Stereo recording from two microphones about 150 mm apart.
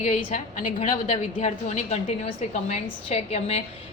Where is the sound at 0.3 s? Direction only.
60° left (ahead or behind).